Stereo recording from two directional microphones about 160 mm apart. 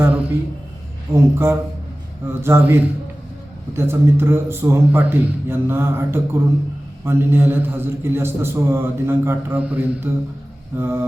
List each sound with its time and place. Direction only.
0.0 s a sound: 10° right (ahead or behind)
1.1 s a man's voice: 10° right (ahead or behind)
2.4 s a man's voice: 15° right (ahead or behind)